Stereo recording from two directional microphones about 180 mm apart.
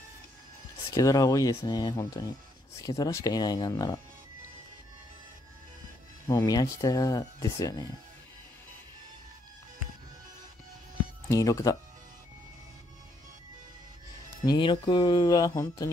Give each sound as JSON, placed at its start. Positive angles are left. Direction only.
{"t": 0.8, "sound": "speech", "side_deg": 20}
{"t": 6.2, "sound": "speech", "side_deg": 20}
{"t": 11.2, "sound": "speech", "side_deg": 20}
{"t": 14.4, "sound": "speech", "side_deg": 25}